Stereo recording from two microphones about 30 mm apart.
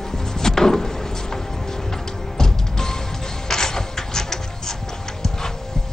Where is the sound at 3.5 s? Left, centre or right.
Centre.